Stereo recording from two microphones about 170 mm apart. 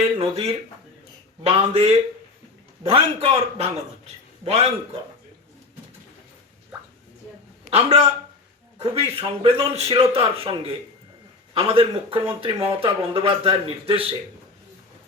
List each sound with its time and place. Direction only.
0.2 s a man's voice: 35° right (ahead or behind)
7.7 s a man's voice: 35° right (ahead or behind)